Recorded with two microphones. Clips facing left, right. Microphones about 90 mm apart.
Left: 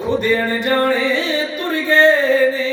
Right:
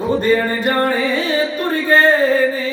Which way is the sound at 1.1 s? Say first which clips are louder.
Right 2 dB; 45° right (ahead or behind).